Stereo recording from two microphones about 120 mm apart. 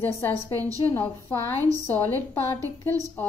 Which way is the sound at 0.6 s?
30° right (ahead or behind).